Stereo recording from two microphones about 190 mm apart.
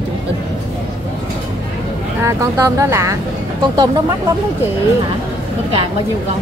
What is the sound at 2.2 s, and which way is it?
Speech, 15° right (ahead or behind).